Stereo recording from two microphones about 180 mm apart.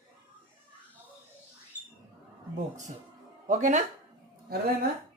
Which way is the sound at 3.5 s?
45° right (ahead or behind).